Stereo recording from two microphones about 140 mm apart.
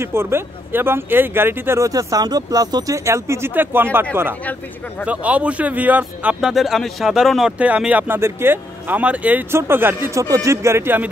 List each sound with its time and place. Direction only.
0.0 s a man's voice: 15° right (ahead or behind)